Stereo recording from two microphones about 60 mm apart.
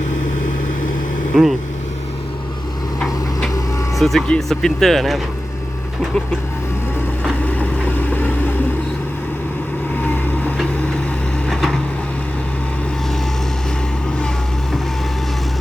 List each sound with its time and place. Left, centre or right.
1.3 s speech: centre
3.9 s speech: centre
7.4 s vehicle: left
11.4 s wood: centre